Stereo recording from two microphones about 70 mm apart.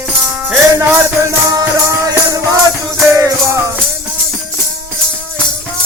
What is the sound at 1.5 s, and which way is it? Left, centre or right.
Music, right.